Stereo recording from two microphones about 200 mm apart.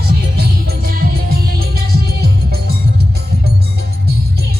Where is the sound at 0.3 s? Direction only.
50° right (ahead or behind).